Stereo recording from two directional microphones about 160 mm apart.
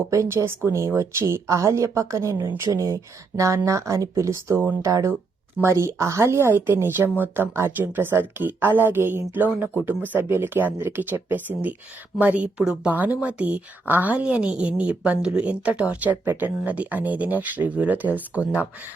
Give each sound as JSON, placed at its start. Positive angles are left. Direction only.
{"t": 0.1, "sound": "a woman's voice", "side_deg": -20}